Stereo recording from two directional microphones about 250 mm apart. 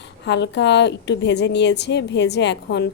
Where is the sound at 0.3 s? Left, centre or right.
Left.